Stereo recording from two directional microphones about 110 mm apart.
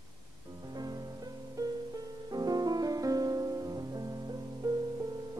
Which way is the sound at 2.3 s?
35° right (ahead or behind).